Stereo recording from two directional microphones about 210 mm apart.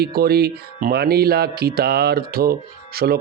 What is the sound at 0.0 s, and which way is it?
Speech, 45° right (ahead or behind).